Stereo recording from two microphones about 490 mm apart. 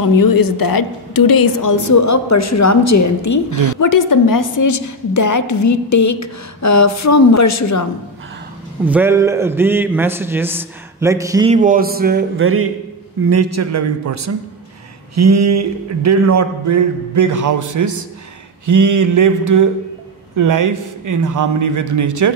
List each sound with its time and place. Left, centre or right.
0.0 s a woman's voice: left
8.8 s a man's voice: centre; by 12.6 s right
13.3 s a sound: right